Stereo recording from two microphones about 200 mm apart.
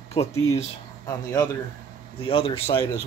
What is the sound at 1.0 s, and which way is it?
Speech, 15° left (ahead or behind).